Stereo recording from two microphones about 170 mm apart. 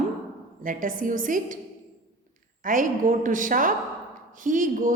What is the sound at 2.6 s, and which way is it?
A woman's voice, 50° right (ahead or behind).